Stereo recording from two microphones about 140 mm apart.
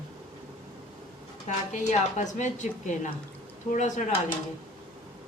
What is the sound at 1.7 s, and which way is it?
Speech, 60° left (ahead or behind).